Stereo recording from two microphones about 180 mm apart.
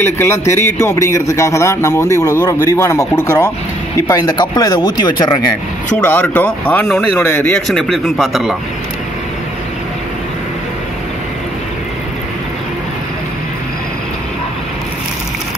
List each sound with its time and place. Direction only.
0.0 s a man's voice: 15° left (ahead or behind)
5.9 s a man's voice: 10° left (ahead or behind)